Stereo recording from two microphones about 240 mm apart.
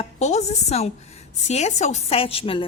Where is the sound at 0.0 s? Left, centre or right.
Left.